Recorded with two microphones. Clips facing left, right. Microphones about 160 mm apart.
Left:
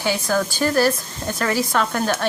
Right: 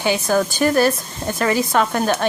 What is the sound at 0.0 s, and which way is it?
Speech, 20° right (ahead or behind).